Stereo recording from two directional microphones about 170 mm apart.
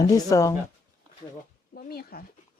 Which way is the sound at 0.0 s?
20° left (ahead or behind).